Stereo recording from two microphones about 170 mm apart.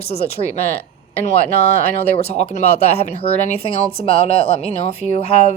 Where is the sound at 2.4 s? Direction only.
40° left (ahead or behind).